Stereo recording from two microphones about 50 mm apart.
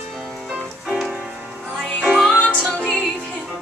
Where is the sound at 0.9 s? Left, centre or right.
Centre.